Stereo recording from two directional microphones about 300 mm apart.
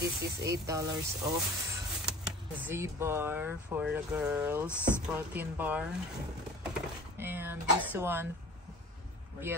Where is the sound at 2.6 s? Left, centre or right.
Centre.